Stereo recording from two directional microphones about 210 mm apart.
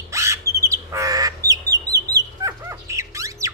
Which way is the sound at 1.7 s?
15° right (ahead or behind).